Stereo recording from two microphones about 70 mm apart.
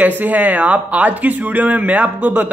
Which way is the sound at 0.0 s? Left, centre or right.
Right.